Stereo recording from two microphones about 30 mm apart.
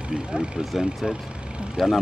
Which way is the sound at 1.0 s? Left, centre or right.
Centre.